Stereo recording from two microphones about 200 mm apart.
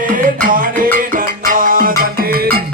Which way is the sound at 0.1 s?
45° right (ahead or behind).